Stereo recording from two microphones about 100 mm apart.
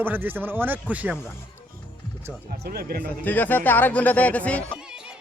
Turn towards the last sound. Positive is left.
turn(degrees=-10)  # may be behind; listen again after turning